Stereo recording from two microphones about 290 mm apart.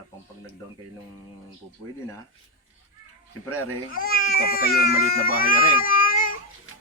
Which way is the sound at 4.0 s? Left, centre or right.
Left.